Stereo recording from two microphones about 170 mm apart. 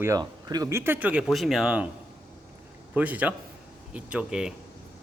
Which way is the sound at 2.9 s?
10° right (ahead or behind).